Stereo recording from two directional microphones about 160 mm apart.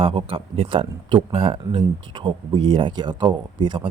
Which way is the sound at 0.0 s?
35° right (ahead or behind).